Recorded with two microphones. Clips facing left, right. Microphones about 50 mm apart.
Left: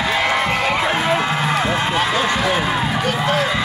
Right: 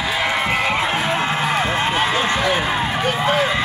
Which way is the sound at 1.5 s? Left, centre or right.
Right.